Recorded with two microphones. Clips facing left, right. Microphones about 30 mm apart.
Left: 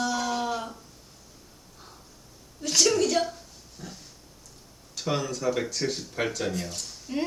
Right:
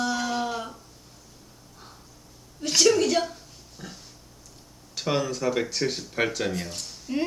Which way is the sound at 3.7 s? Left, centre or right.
Right.